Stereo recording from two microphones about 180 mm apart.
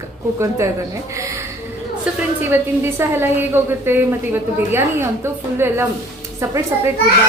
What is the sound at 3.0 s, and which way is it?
Speech, 10° right (ahead or behind).